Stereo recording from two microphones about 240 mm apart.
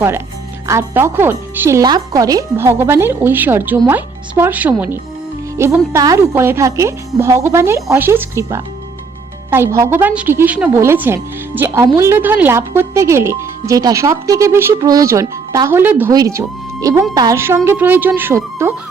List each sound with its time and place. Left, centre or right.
0.7 s speech: centre